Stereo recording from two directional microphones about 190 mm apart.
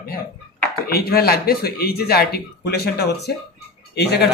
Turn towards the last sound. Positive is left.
turn(degrees=60)  # may be behind; listen again after turning